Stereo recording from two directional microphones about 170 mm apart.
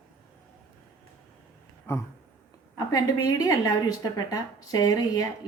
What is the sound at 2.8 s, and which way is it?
A woman's voice, 20° left (ahead or behind).